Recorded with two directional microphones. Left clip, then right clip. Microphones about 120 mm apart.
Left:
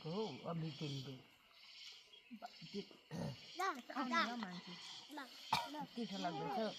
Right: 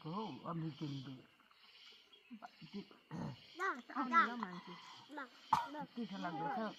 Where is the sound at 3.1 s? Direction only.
20° left (ahead or behind).